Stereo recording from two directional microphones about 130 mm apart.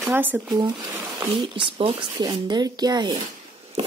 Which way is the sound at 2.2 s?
30° right (ahead or behind).